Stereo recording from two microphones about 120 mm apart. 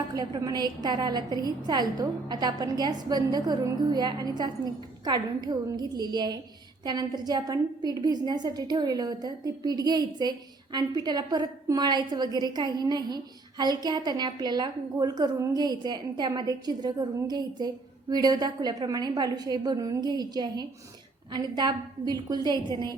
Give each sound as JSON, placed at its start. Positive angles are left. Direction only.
{"t": 0.1, "sound": "a woman's voice", "side_deg": -30}